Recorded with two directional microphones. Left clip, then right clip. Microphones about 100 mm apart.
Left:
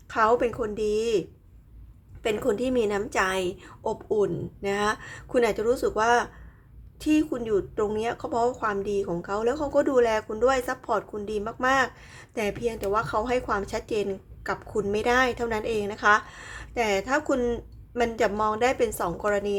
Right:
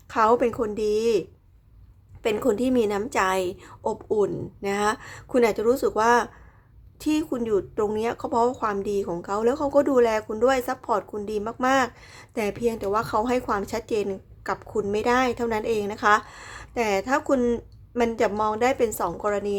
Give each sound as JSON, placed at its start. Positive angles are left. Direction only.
{"t": 0.1, "sound": "speech", "side_deg": -35}
{"t": 2.2, "sound": "speech", "side_deg": -35}